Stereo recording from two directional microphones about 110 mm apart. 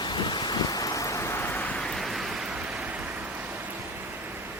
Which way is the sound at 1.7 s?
5° left (ahead or behind).